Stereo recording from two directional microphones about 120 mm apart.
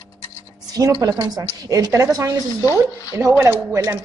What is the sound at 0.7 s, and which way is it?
Speech, 25° right (ahead or behind).